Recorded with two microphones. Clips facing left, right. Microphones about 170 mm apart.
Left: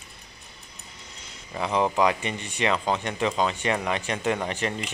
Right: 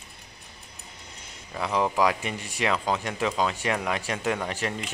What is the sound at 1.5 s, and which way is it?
Speech, centre (ahead or behind).